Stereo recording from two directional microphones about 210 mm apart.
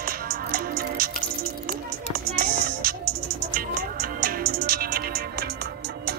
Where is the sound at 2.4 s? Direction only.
45° right (ahead or behind).